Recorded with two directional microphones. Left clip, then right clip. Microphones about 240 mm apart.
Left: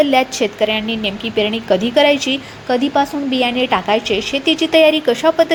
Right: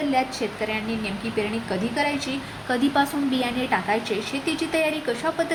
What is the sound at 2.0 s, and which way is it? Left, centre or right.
Speech, left.